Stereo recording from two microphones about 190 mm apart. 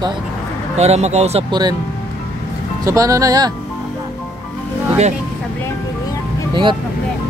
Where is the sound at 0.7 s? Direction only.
35° right (ahead or behind).